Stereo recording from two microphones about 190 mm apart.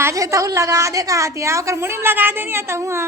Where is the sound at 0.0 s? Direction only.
15° right (ahead or behind).